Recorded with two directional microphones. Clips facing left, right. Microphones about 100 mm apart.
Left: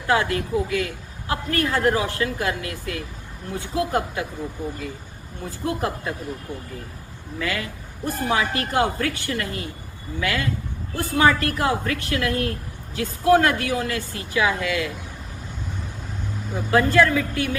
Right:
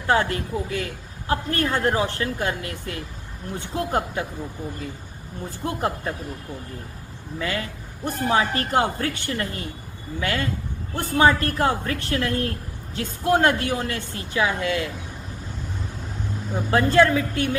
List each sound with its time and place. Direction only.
0.1 s a man's voice: 35° right (ahead or behind)
5.6 s a man's voice: 30° right (ahead or behind)
7.3 s a man's voice: 30° right (ahead or behind)
16.7 s a woman's voice: 30° right (ahead or behind)